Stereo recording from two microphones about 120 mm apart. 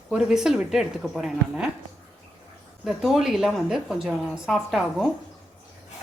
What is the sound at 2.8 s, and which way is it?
A woman's voice, centre (ahead or behind).